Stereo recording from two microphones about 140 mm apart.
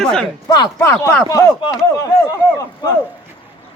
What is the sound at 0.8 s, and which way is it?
Speech, 15° left (ahead or behind).